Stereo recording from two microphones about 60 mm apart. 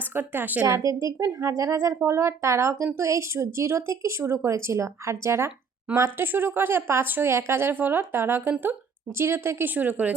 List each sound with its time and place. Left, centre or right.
0.0 s a woman's voice: right
0.8 s speech: right
6.1 s speech: right
7.3 s speech: right
9.7 s speech: right